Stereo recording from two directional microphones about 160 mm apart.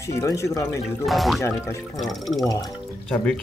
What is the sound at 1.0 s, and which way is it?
Speech, centre (ahead or behind).